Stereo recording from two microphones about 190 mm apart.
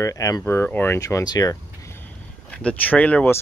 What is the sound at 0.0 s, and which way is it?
Speech, 20° left (ahead or behind).